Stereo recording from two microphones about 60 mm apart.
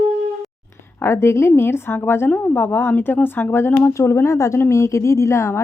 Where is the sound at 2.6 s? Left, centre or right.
Left.